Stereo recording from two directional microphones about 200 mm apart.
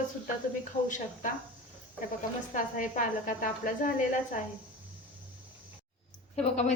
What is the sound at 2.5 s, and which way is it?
A woman's voice, 40° left (ahead or behind).